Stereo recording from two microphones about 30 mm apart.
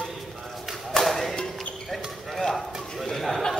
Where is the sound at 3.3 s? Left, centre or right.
Centre.